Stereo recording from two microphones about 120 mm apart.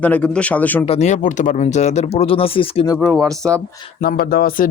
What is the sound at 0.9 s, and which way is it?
Speech, 70° left (ahead or behind).